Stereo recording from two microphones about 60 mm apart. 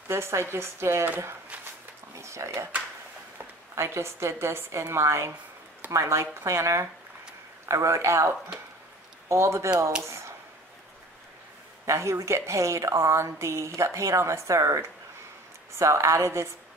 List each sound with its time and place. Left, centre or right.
0.1 s a woman's voice: right
2.1 s speech: right
3.7 s a woman's voice: right
9.3 s a woman's voice: right
10.0 s a sound: right
11.8 s a woman's voice: right